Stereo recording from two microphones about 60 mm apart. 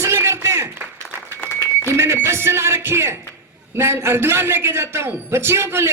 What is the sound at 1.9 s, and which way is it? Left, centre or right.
A man's voice, right.